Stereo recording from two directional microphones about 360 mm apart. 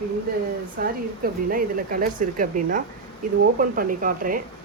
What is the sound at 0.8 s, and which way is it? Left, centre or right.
Speech, right.